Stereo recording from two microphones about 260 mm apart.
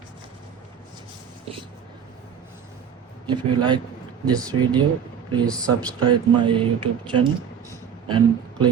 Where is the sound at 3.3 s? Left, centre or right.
Centre.